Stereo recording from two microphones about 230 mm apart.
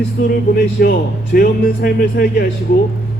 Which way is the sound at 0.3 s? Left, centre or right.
Left.